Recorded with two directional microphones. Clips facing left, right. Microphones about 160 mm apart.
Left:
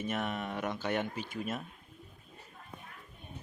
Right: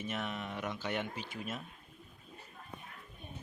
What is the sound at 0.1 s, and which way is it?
Speech, 50° left (ahead or behind).